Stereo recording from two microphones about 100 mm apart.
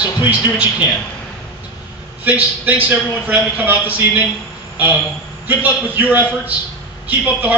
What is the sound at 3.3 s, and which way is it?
Speech, 15° right (ahead or behind).